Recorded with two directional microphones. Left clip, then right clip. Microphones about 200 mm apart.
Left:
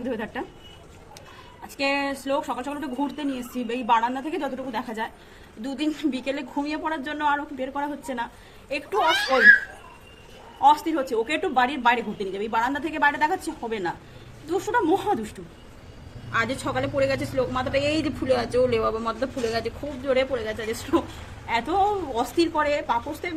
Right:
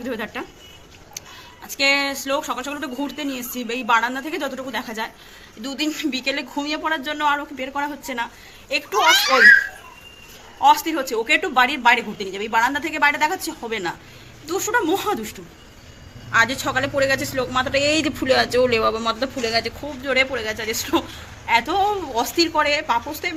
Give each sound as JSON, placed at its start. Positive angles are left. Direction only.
{"t": 0.0, "sound": "a man's voice", "side_deg": -10}
{"t": 1.8, "sound": "a man's voice", "side_deg": -5}
{"t": 10.6, "sound": "a woman's voice", "side_deg": -5}
{"t": 16.3, "sound": "a man's voice", "side_deg": -15}